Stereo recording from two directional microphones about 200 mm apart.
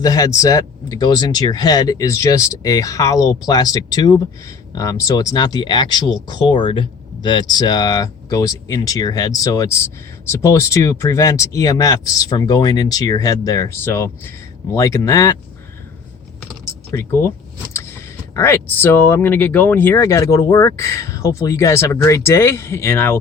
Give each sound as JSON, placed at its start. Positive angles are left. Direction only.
{"t": 0.0, "sound": "speech", "side_deg": 15}
{"t": 16.9, "sound": "speech", "side_deg": 10}